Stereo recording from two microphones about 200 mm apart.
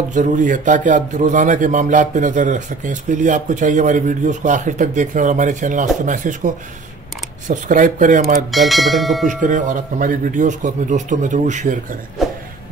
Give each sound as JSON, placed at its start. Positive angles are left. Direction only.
{"t": 0.1, "sound": "speech", "side_deg": -40}
{"t": 8.5, "sound": "speech", "side_deg": 0}
{"t": 9.3, "sound": "speech", "side_deg": -40}
{"t": 12.2, "sound": "a sound", "side_deg": 0}